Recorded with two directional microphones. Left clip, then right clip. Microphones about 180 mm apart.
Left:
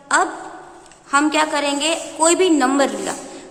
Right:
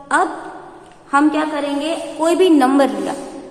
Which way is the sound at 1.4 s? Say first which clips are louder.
Left 2 dB; 35° left (ahead or behind).